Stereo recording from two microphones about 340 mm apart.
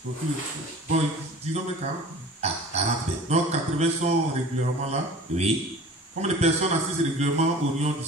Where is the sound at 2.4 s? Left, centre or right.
Centre.